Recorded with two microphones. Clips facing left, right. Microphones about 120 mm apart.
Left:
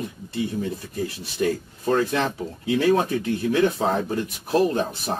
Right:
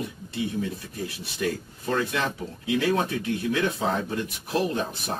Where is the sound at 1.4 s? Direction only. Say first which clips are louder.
Left 5 dB; 35° left (ahead or behind).